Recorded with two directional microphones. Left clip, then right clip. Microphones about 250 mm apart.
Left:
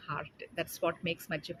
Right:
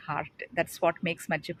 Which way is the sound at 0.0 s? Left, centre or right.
Right.